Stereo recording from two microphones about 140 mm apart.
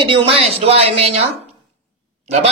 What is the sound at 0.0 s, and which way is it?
Speech, 40° right (ahead or behind).